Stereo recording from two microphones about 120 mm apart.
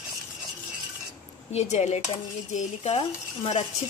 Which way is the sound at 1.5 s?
65° left (ahead or behind).